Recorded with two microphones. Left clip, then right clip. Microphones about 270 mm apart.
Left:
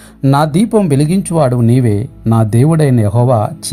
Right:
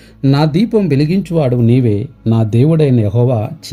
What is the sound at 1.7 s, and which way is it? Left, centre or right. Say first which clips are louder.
Speech: even; left.